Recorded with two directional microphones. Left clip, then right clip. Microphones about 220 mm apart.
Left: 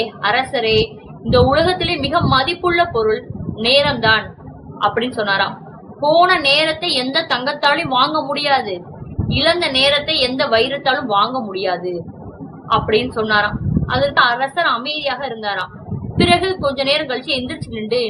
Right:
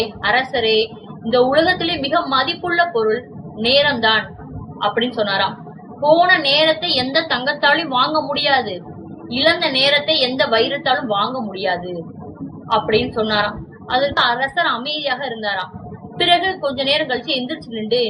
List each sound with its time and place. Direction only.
0.2 s a woman's voice: 15° left (ahead or behind)
12.9 s a woman's voice: 15° left (ahead or behind)